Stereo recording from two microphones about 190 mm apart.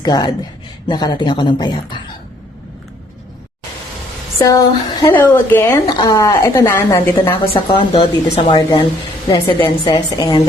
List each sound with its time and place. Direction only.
0.0 s speech: 20° left (ahead or behind)
4.4 s speech: 15° left (ahead or behind)